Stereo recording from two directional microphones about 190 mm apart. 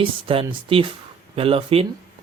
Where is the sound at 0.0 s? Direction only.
30° right (ahead or behind).